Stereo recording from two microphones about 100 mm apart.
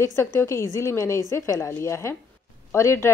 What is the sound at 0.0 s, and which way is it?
A woman's voice, 30° left (ahead or behind).